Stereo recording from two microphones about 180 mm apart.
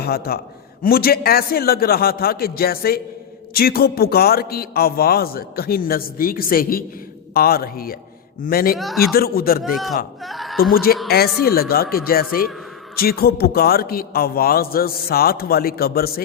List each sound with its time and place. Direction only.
0.0 s a man's voice: 60° left (ahead or behind)
8.8 s speech: centre (ahead or behind)
9.1 s a man's voice: 55° left (ahead or behind)
9.6 s speech: centre (ahead or behind)
10.2 s a sound: centre (ahead or behind)
10.6 s a man's voice: 55° left (ahead or behind)